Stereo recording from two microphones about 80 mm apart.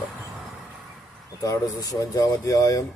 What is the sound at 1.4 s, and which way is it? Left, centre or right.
Speech, left.